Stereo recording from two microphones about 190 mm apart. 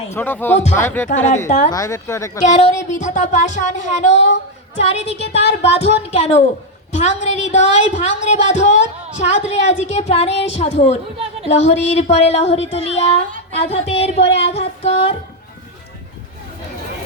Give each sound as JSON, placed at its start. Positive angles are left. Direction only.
{"t": 0.1, "sound": "speech", "side_deg": 10}
{"t": 1.1, "sound": "speech", "side_deg": 35}
{"t": 1.7, "sound": "speech", "side_deg": 15}
{"t": 2.4, "sound": "speech", "side_deg": 35}